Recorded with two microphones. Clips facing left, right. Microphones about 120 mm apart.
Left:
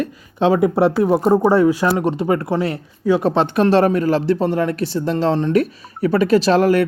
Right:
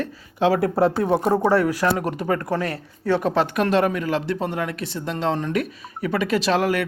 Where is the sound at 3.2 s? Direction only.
30° left (ahead or behind).